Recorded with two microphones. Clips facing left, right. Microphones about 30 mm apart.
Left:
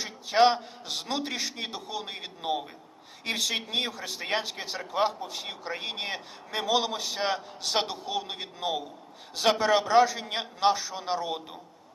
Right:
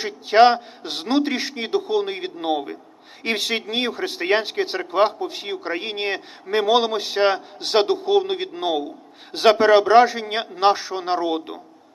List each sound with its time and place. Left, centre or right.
0.0 s a man's voice: right